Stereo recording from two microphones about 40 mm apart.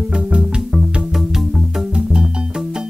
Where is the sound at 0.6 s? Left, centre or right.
Centre.